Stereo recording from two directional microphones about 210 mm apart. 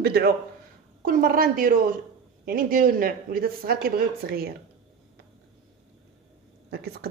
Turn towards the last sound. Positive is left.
turn(degrees=-50)  # may be behind; listen again after turning